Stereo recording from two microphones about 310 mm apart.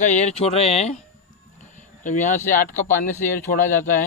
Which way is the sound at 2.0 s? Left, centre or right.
Left.